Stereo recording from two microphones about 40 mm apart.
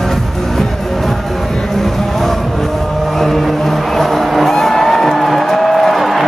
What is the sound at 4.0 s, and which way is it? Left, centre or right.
Music, centre.